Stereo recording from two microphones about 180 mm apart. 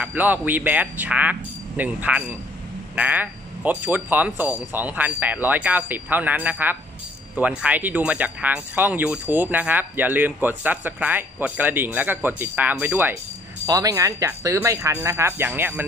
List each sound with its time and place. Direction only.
0.0 s speech: 10° right (ahead or behind)